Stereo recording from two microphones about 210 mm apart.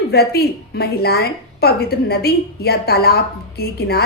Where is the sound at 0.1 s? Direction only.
50° left (ahead or behind).